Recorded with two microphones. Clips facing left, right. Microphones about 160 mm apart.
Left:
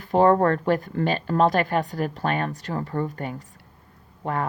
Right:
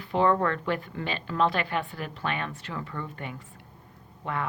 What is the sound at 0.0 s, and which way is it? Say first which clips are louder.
A woman's voice: left 6 dB; 45° left (ahead or behind).